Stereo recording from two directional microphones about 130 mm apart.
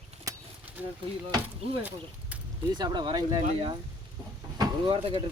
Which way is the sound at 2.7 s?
35° right (ahead or behind).